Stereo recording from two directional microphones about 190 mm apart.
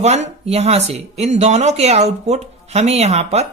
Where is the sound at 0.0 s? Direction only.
35° right (ahead or behind).